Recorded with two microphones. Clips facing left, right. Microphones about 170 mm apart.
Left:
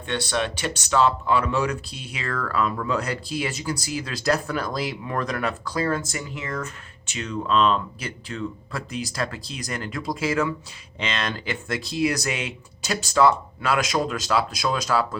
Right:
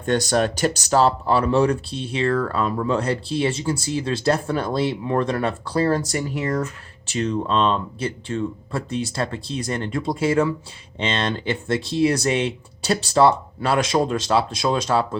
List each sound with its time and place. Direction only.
0.0 s speech: 40° right (ahead or behind)